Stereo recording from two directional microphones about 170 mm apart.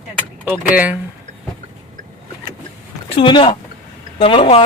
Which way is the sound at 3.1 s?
30° left (ahead or behind).